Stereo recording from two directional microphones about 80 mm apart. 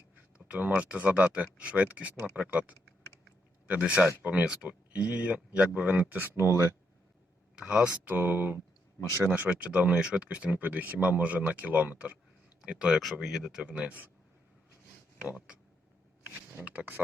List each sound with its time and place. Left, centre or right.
0.3 s a sound: centre
0.8 s speech: centre
7.6 s speech: centre
8.1 s speech: right
13.0 s speech: centre
16.6 s speech: centre